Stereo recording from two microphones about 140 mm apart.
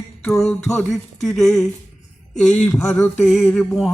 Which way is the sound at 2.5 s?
10° left (ahead or behind).